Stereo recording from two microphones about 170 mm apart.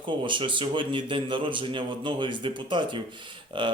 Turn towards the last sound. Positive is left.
turn(degrees=-30)  # may be behind; listen again after turning